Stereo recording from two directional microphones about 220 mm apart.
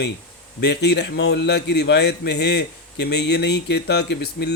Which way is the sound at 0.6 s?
50° left (ahead or behind).